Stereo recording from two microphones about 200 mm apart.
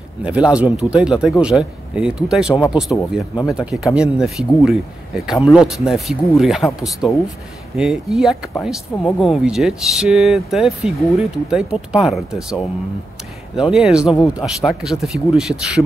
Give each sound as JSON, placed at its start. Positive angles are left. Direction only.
{"t": 0.2, "sound": "speech", "side_deg": -5}
{"t": 3.0, "sound": "speech", "side_deg": 15}
{"t": 3.5, "sound": "speech", "side_deg": -5}
{"t": 13.6, "sound": "speech", "side_deg": 0}